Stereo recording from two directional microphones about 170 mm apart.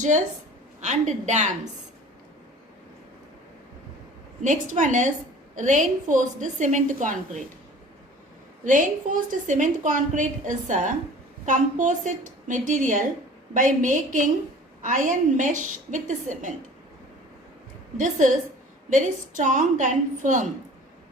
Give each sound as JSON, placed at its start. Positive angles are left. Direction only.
{"t": 0.8, "sound": "a woman's voice", "side_deg": -45}
{"t": 4.4, "sound": "a woman's voice", "side_deg": -45}
{"t": 8.6, "sound": "a woman's voice", "side_deg": -50}
{"t": 17.9, "sound": "a woman's voice", "side_deg": -50}